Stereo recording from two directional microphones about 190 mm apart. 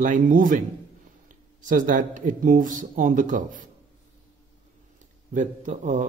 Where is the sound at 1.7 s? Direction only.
45° right (ahead or behind).